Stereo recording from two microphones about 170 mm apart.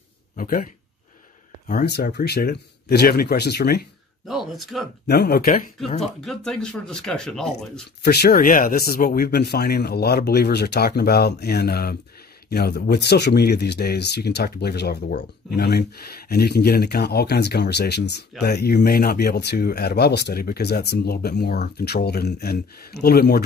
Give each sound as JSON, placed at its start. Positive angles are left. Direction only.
{"t": 0.4, "sound": "speech", "side_deg": 55}
{"t": 2.1, "sound": "speech", "side_deg": 70}
{"t": 4.3, "sound": "speech", "side_deg": 0}
{"t": 5.0, "sound": "speech", "side_deg": 70}
{"t": 6.2, "sound": "speech", "side_deg": 5}
{"t": 8.0, "sound": "speech", "side_deg": 70}